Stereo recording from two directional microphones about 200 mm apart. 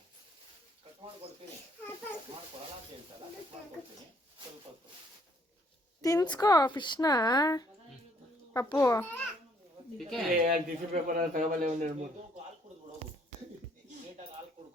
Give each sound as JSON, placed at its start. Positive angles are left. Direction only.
{"t": 6.0, "sound": "speech", "side_deg": 15}
{"t": 8.7, "sound": "a child's voice", "side_deg": 10}
{"t": 10.3, "sound": "speech", "side_deg": -40}